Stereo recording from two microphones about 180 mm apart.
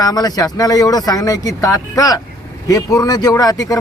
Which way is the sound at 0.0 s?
20° left (ahead or behind).